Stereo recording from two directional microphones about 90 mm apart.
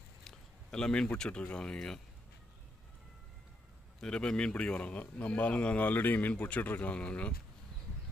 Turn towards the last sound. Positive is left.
turn(degrees=15)  # may be behind; listen again after turning